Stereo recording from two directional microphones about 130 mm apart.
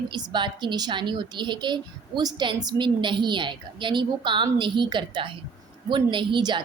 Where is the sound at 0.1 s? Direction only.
35° right (ahead or behind).